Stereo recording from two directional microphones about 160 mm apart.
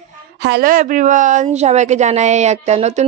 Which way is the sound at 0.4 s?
80° right.